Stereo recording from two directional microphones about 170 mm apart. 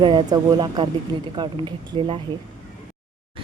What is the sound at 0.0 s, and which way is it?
Speech, 25° right (ahead or behind).